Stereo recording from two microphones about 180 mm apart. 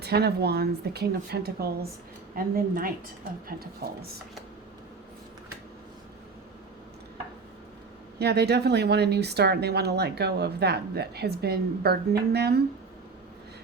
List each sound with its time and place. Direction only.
0.0 s a woman's voice: 65° right (ahead or behind)
8.2 s speech: 65° right (ahead or behind)